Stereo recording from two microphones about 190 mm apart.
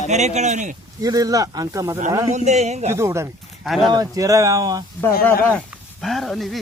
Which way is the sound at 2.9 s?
15° right (ahead or behind).